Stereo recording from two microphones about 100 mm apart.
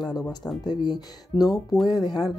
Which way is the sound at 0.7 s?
45° left (ahead or behind).